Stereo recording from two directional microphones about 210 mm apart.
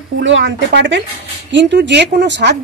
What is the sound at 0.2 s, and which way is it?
A woman's voice, 60° right (ahead or behind).